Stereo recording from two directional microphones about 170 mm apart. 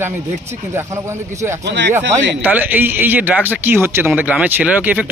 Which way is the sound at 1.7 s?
90° right.